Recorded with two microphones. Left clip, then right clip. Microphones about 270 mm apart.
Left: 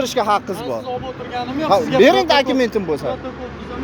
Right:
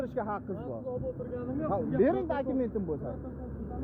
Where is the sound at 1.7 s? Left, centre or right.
Left.